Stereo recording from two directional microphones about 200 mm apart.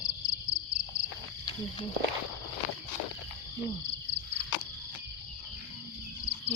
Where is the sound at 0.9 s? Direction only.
15° left (ahead or behind).